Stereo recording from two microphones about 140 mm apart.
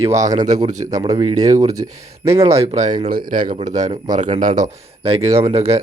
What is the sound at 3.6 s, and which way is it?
Speech, 55° right (ahead or behind).